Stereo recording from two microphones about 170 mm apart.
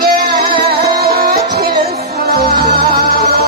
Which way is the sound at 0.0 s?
60° right (ahead or behind).